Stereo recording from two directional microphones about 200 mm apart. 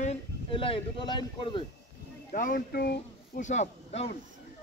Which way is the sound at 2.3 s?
45° left (ahead or behind).